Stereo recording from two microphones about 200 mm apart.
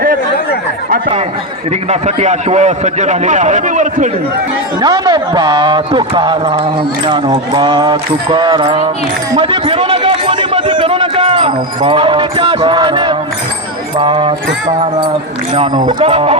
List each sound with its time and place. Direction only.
0.9 s a man's voice: 45° right (ahead or behind)
4.8 s speech: 20° right (ahead or behind)
9.3 s a sound: 25° right (ahead or behind)
13.9 s speech: 25° right (ahead or behind)
15.5 s speech: 30° right (ahead or behind)